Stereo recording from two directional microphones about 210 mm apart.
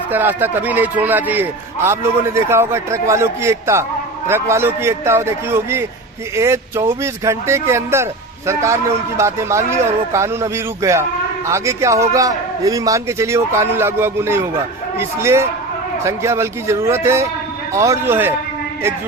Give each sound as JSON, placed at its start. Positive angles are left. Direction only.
{"t": 0.1, "sound": "a man's voice", "side_deg": -10}